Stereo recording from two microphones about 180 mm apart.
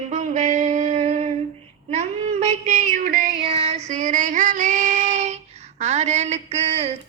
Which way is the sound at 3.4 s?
30° right (ahead or behind).